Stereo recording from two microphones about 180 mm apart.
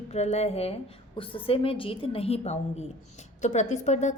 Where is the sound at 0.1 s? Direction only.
35° left (ahead or behind).